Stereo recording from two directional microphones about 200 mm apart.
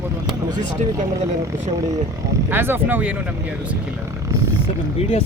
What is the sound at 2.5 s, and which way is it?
Speech, 10° right (ahead or behind).